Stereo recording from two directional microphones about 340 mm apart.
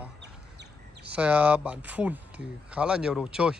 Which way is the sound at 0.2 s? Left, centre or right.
Right.